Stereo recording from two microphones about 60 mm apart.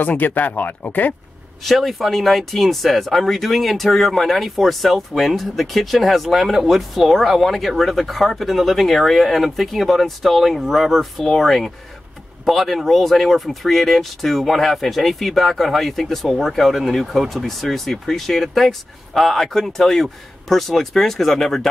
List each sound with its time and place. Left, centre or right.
0.0 s speech: left
1.6 s speech: centre